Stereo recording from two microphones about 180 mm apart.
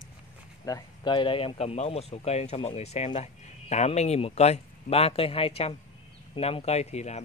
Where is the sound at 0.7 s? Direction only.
25° left (ahead or behind).